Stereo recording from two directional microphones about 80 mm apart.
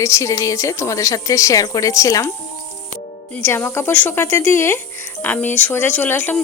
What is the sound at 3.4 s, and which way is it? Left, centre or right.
A woman's voice, left.